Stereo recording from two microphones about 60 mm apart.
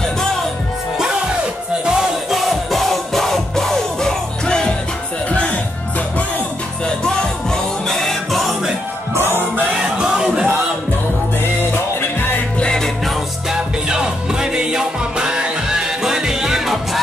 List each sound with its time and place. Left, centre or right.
1.9 s music: centre; by 6.2 s left
7.0 s music: centre
9.1 s music: right
9.8 s music: centre
11.4 s music: left
12.5 s music: centre
13.5 s music: centre